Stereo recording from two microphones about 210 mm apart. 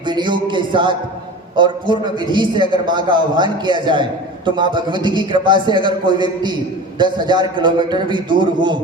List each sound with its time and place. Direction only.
0.0 s a man's voice: 20° right (ahead or behind)